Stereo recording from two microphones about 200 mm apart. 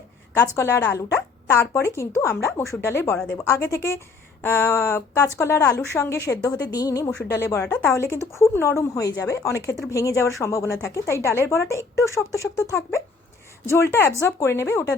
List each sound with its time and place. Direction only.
0.3 s a woman's voice: 15° left (ahead or behind)
13.9 s a woman's voice: 15° left (ahead or behind)